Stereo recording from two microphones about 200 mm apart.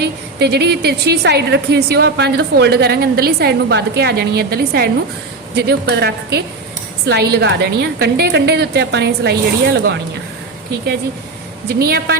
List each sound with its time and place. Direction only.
0.0 s a woman's voice: 55° right (ahead or behind)
11.9 s a woman's voice: 55° right (ahead or behind)